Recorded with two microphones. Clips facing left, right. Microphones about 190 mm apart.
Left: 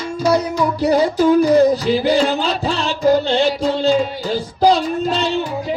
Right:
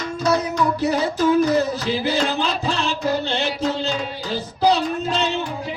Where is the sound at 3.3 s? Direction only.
35° left (ahead or behind).